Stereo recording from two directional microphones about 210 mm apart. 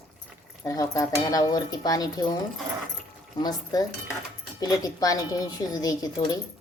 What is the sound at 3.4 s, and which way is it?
A woman's voice, 20° left (ahead or behind).